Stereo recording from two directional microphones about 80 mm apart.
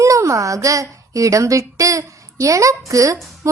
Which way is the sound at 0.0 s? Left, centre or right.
Right.